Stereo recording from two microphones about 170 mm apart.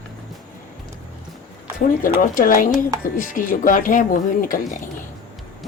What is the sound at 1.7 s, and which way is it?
Speech, 55° left (ahead or behind).